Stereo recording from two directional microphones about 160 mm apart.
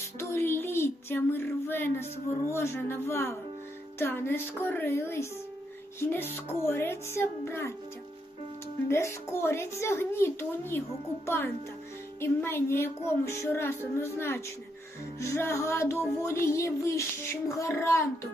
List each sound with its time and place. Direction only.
0.2 s a sound: 15° left (ahead or behind)
2.5 s music: 15° left (ahead or behind)
8.9 s music: 15° left (ahead or behind)